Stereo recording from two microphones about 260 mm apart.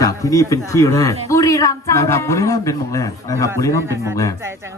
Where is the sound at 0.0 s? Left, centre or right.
Centre.